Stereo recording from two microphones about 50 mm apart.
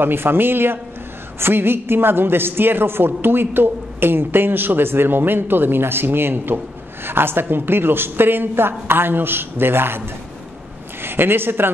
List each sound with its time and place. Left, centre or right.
0.0 s a woman's voice: right